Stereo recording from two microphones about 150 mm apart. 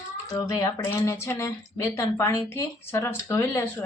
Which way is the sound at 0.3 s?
20° left (ahead or behind).